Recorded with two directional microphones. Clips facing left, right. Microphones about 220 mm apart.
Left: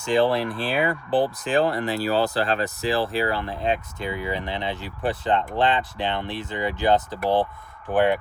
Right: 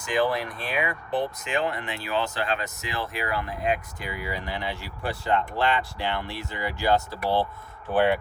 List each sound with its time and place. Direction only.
0.0 s speech: 30° left (ahead or behind)